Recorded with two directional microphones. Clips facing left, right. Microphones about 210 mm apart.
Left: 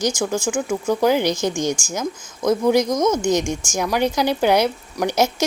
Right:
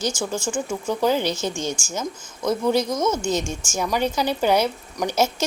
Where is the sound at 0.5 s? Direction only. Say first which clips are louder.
Left 4 dB; 10° left (ahead or behind).